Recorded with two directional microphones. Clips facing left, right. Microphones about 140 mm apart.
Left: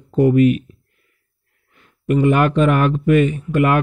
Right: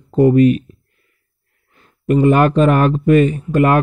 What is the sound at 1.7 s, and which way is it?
Speech, 35° right (ahead or behind).